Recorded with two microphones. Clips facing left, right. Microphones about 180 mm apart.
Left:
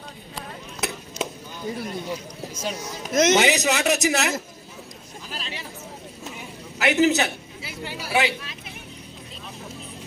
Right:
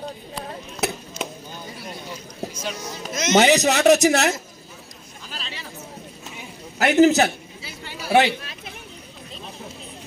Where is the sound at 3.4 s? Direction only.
40° right (ahead or behind).